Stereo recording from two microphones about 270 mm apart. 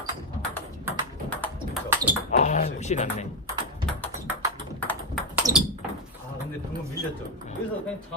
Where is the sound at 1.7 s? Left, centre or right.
Centre.